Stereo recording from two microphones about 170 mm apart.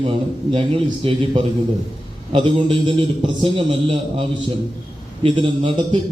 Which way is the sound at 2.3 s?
30° right (ahead or behind).